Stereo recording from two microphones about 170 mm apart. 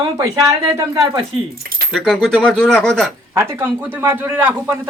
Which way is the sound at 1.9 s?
Centre (ahead or behind).